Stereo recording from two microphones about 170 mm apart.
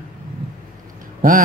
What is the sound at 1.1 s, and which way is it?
Speech, 55° right (ahead or behind).